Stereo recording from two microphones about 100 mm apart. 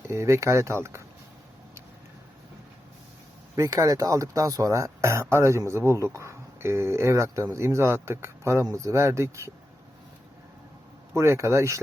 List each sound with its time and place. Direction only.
0.1 s speech: 30° right (ahead or behind)
3.5 s speech: 35° right (ahead or behind)
11.1 s speech: 30° right (ahead or behind)